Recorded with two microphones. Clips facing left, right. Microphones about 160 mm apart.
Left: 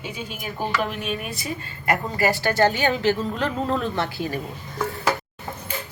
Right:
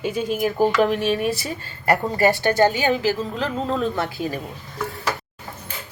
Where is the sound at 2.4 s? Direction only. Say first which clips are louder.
Right 2 dB; 20° right (ahead or behind).